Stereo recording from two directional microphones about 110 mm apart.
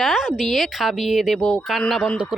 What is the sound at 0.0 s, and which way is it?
A woman's voice, 5° right (ahead or behind).